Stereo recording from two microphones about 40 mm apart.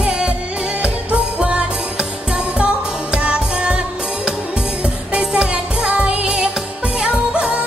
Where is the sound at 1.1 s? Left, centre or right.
Right.